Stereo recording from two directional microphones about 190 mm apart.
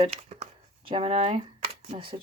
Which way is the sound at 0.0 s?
30° right (ahead or behind).